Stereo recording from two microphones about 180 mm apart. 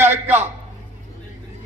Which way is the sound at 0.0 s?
10° right (ahead or behind).